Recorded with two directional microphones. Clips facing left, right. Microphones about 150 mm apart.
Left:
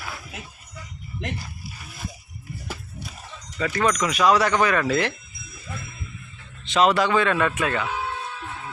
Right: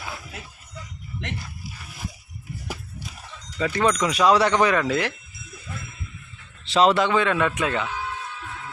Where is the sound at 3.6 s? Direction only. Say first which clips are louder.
Right 1 dB; 20° right (ahead or behind).